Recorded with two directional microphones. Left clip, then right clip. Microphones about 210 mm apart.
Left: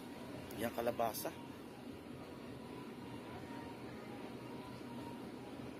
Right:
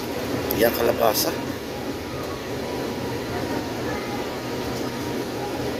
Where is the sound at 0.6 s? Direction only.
10° left (ahead or behind).